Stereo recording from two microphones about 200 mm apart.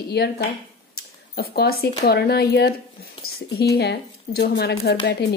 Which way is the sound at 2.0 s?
55° left (ahead or behind).